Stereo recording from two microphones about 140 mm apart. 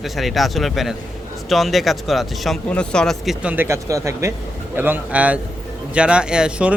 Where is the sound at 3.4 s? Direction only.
15° right (ahead or behind).